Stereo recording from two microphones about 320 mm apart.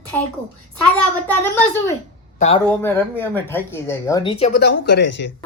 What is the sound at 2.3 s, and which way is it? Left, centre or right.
Speech, centre.